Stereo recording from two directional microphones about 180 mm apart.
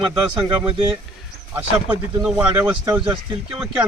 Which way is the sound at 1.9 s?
10° right (ahead or behind).